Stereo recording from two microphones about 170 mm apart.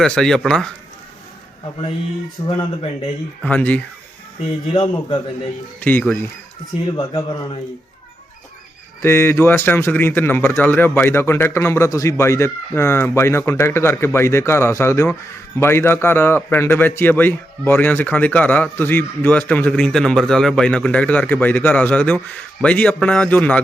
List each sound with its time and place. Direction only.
0.0 s speech: 5° left (ahead or behind)
2.4 s speech: 30° left (ahead or behind)
3.4 s a man's voice: 10° left (ahead or behind)
4.7 s speech: 30° left (ahead or behind)
5.8 s a man's voice: 10° left (ahead or behind)
6.9 s speech: 25° left (ahead or behind)
9.0 s a man's voice: 15° left (ahead or behind)